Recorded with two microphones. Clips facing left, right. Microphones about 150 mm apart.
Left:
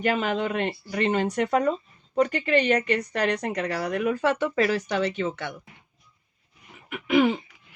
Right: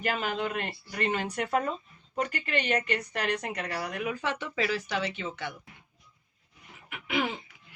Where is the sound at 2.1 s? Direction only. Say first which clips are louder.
Left 9 dB; 35° left (ahead or behind).